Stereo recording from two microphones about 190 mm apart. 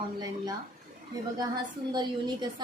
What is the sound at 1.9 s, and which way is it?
Speech, 25° right (ahead or behind).